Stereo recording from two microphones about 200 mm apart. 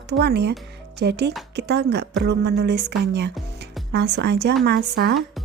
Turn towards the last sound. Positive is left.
turn(degrees=-55)  # may be behind; listen again after turning